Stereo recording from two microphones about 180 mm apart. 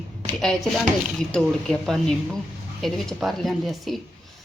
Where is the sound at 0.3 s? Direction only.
Centre (ahead or behind).